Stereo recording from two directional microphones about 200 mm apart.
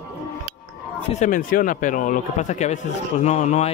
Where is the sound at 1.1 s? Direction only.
40° left (ahead or behind).